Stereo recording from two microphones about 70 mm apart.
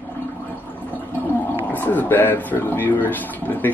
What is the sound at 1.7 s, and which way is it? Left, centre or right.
Speech, left.